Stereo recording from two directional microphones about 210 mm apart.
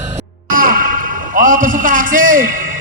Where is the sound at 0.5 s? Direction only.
40° right (ahead or behind).